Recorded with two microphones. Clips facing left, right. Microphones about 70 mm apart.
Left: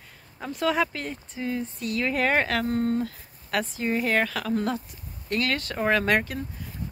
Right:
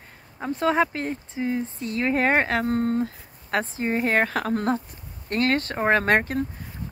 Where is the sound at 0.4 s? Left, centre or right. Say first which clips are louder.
Right 3 dB; right.